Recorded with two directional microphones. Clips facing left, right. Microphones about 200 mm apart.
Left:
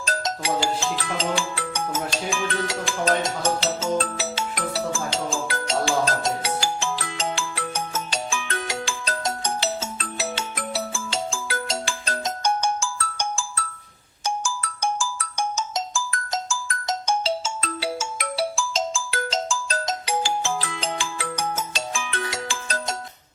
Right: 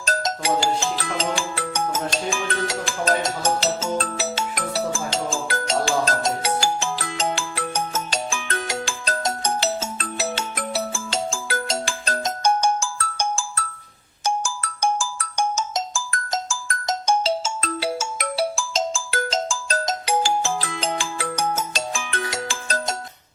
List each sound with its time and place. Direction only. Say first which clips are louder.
0.0 s speech: right 2 dB; 45° right (ahead or behind)
3.6 s music: even; 45° right (ahead or behind)
14.3 s ringtone: right 3 dB; 45° right (ahead or behind)